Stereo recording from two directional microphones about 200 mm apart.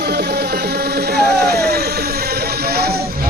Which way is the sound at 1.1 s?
55° right (ahead or behind).